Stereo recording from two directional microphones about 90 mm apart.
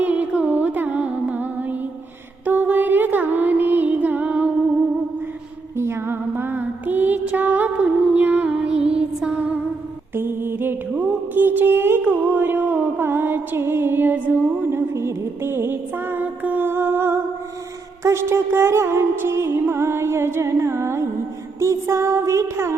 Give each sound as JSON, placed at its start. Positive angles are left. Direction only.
{"t": 0.0, "sound": "music", "side_deg": -15}
{"t": 5.7, "sound": "music", "side_deg": -30}